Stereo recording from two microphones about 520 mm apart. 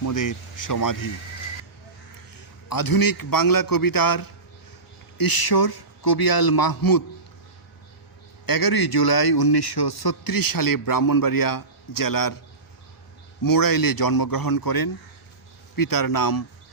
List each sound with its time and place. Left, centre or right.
0.0 s a man's voice: left
2.3 s a man's voice: left
8.4 s a man's voice: left
13.4 s a man's voice: left